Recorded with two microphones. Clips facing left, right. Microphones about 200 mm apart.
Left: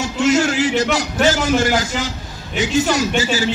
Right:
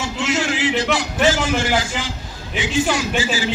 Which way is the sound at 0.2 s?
45° left (ahead or behind).